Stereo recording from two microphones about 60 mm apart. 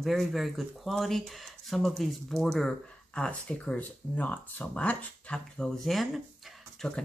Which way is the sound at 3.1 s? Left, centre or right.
Left.